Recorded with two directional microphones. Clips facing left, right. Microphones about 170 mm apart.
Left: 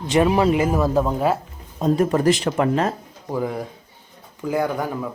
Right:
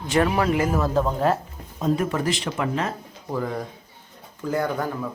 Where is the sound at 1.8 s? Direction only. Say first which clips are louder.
Left 5 dB; 35° left (ahead or behind).